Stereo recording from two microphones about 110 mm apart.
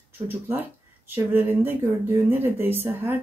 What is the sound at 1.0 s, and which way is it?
Speech, 20° right (ahead or behind).